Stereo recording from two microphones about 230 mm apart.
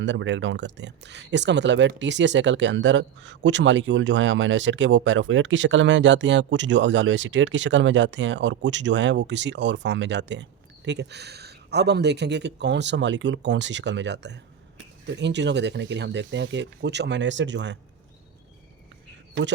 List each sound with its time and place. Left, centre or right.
0.0 s speech: right